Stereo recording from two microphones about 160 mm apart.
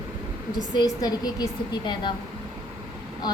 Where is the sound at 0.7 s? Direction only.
25° left (ahead or behind).